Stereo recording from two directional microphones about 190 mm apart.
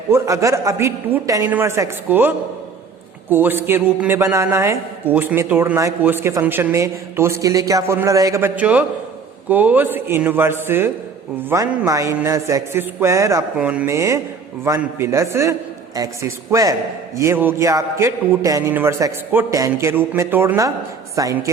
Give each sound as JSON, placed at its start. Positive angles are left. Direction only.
{"t": 0.1, "sound": "a man's voice", "side_deg": -15}